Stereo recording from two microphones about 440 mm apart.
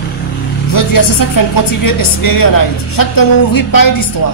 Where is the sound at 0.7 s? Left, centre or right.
Left.